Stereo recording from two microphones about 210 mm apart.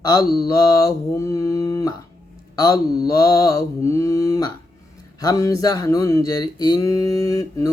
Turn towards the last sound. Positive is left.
turn(degrees=15)  # may be behind; listen again after turning